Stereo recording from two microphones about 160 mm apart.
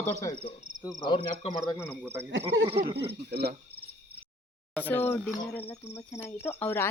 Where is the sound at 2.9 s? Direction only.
90° right.